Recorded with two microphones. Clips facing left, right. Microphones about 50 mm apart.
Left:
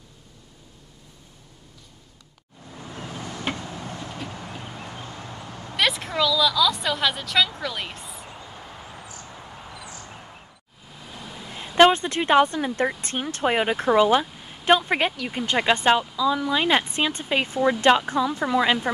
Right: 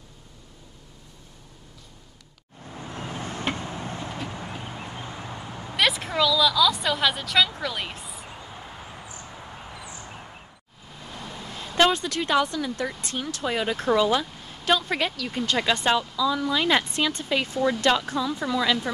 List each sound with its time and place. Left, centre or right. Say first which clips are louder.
2.9 s vehicle: right 1 dB; right
3.5 s a sound: right 1 dB; right
5.8 s a woman's voice: even; centre
11.0 s vehicle: right 1 dB; centre
11.5 s speech: left 5 dB; left
14.2 s speech: left 4 dB; centre; by 18.8 s left